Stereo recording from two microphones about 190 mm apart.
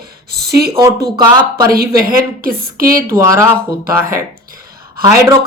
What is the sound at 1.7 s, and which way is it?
A woman's voice, 50° right (ahead or behind).